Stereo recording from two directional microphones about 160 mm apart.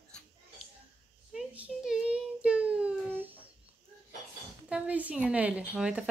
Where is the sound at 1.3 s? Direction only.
5° right (ahead or behind).